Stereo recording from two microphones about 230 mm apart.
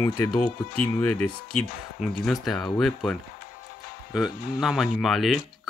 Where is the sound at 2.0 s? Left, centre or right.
Centre.